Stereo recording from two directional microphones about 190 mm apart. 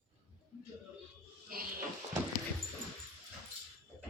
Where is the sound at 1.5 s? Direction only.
50° right (ahead or behind).